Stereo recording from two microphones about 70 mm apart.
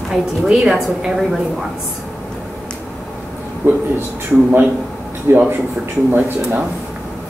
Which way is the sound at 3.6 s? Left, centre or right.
Right.